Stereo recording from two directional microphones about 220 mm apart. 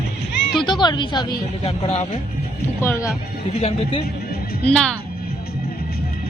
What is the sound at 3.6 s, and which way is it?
Speech, 25° left (ahead or behind).